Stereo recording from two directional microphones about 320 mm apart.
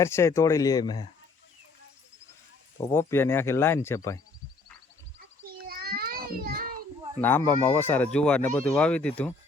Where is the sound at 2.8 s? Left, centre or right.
Centre.